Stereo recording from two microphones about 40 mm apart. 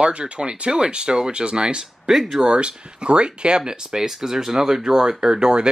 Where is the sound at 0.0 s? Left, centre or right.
Right.